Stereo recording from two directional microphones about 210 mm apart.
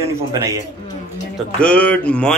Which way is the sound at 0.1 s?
15° right (ahead or behind).